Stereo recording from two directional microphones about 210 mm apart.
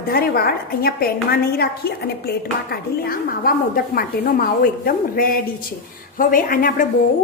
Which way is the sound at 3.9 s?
45° left (ahead or behind).